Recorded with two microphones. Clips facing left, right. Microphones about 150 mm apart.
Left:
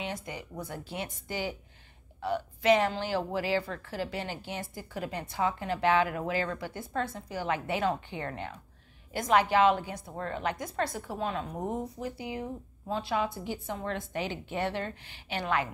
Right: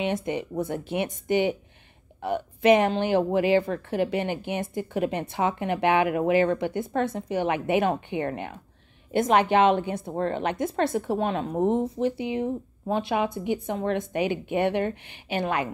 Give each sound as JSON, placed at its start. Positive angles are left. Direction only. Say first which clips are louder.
{"t": 0.0, "sound": "a woman's voice", "louder": "right 10 dB", "side_deg": -20}